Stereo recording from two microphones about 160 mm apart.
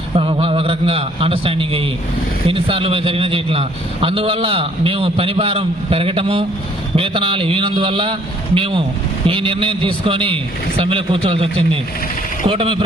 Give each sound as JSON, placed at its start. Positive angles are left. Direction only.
{"t": 0.1, "sound": "a man's voice", "side_deg": -35}